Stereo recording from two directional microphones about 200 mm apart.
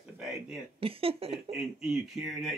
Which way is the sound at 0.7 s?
30° right (ahead or behind).